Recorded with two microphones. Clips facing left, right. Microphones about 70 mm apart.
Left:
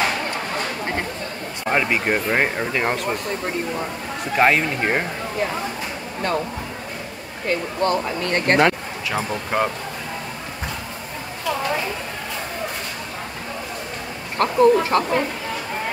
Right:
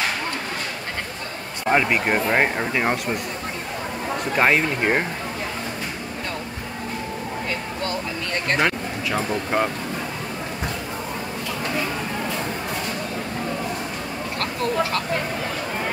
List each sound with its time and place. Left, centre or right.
1.7 s speech: centre
4.4 s speech: centre
8.5 s speech: centre
14.4 s speech: left